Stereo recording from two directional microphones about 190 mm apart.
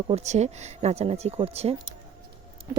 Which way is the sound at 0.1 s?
35° right (ahead or behind).